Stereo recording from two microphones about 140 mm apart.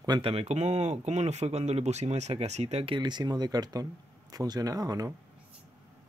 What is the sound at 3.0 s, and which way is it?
Speech, 30° right (ahead or behind).